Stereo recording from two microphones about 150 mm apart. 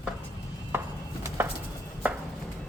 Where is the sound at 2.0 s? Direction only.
10° right (ahead or behind).